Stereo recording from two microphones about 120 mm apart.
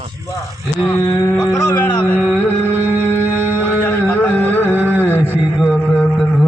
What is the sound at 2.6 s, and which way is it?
Music, 15° right (ahead or behind).